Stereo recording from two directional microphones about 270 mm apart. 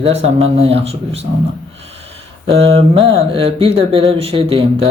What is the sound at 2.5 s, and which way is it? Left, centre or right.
Speech, right.